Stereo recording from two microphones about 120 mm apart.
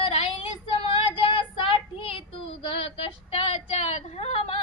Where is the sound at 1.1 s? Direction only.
45° left (ahead or behind).